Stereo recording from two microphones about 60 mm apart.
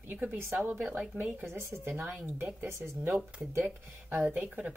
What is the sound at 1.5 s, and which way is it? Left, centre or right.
Speech, right.